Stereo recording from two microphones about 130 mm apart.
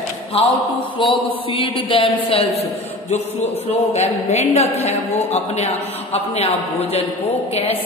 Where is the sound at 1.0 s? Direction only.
45° left (ahead or behind).